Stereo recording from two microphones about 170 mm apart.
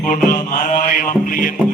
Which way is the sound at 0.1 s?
55° left (ahead or behind).